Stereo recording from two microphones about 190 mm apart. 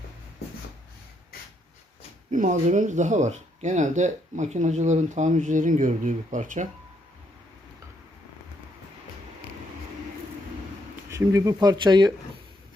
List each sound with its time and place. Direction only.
2.3 s speech: 40° right (ahead or behind)
11.1 s speech: 15° right (ahead or behind)